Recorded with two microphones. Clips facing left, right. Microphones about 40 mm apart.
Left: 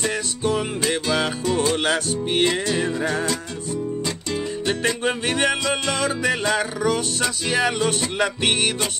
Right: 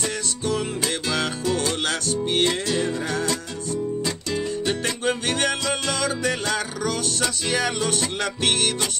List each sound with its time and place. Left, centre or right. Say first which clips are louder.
0.0 s music: left 3 dB; centre
1.9 s music: left 2 dB; left
2.4 s music: left 2 dB; centre
4.0 s music: even; centre
5.0 s music: even; left